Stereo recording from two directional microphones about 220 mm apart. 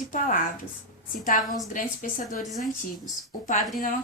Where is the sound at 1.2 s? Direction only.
40° left (ahead or behind).